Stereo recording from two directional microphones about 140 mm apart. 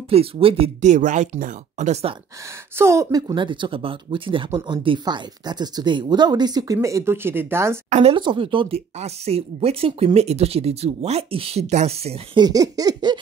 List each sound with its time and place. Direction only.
0.1 s speech: 40° right (ahead or behind)
0.7 s speech: 60° right (ahead or behind)
2.8 s speech: 20° right (ahead or behind)
7.9 s speech: 45° right (ahead or behind)
8.2 s speech: 35° right (ahead or behind)
12.4 s speech: 25° right (ahead or behind)